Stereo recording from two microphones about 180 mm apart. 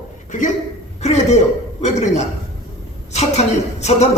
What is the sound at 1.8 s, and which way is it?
A man's voice, 40° left (ahead or behind).